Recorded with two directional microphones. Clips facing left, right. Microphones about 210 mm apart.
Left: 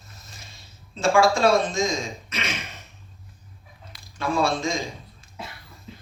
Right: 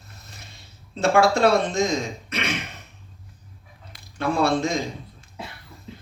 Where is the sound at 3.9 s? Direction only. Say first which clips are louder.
Right 1 dB; 60° right (ahead or behind).